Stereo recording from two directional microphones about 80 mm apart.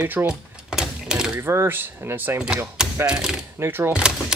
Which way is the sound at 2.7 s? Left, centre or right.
Centre.